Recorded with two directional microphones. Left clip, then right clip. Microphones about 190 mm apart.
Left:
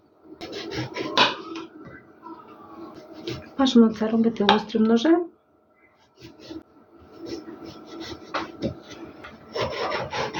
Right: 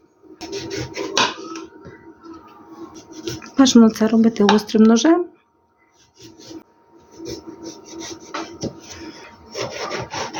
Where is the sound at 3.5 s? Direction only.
55° right (ahead or behind).